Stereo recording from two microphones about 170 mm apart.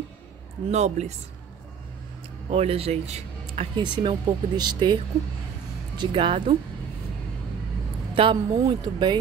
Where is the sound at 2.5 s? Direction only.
35° right (ahead or behind).